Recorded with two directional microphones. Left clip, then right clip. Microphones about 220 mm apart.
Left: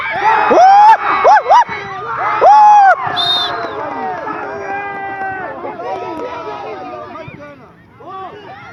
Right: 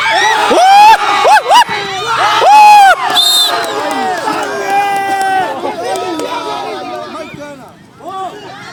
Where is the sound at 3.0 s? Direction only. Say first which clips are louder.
Right 6 dB; 65° right (ahead or behind).